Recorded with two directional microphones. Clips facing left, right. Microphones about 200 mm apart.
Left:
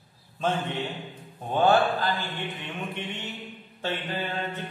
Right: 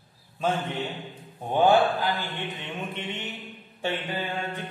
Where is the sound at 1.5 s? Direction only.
10° right (ahead or behind).